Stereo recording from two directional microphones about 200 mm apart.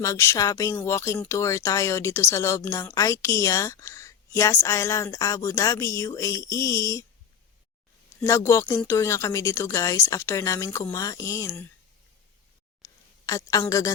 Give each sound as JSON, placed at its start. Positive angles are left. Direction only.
{"t": 0.0, "sound": "speech", "side_deg": 15}
{"t": 8.2, "sound": "speech", "side_deg": 15}
{"t": 12.8, "sound": "a sound", "side_deg": 15}